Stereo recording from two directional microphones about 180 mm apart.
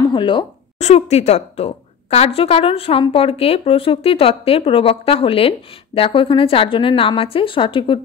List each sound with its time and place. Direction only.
0.0 s a woman's voice: 25° left (ahead or behind)
0.7 s a woman's voice: 40° left (ahead or behind)